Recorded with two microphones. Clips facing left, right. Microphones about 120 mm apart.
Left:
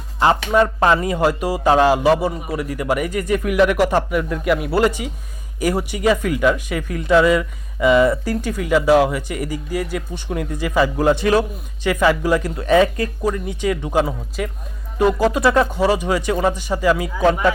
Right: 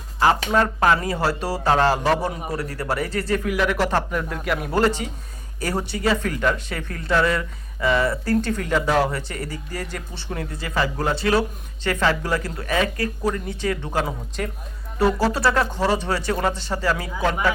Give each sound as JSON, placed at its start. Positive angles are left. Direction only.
{"t": 0.2, "sound": "speech", "side_deg": 20}